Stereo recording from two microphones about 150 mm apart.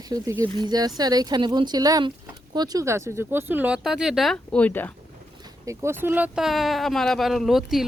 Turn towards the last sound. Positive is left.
turn(degrees=0)  # may be behind; listen again after turning